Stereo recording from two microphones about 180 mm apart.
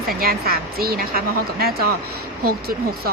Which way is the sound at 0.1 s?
55° right (ahead or behind).